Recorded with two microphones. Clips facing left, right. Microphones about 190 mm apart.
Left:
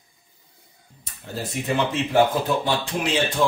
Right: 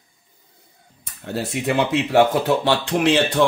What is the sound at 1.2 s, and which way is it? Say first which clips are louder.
Speech: right 6 dB; 70° right (ahead or behind).